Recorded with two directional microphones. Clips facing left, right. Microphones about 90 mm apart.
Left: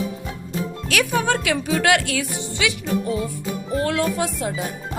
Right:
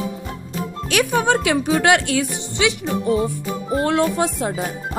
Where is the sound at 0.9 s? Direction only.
25° right (ahead or behind).